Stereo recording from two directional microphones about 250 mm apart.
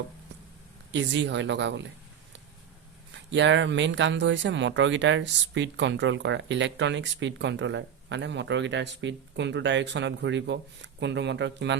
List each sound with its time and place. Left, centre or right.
0.9 s speech: right
3.3 s speech: right